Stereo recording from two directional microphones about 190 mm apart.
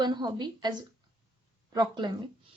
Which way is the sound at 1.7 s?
25° right (ahead or behind).